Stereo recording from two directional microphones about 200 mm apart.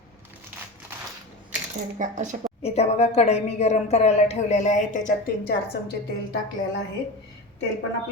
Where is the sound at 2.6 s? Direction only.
30° left (ahead or behind); by 5.9 s 50° left (ahead or behind).